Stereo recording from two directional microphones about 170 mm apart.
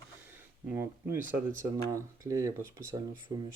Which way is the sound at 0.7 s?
15° right (ahead or behind).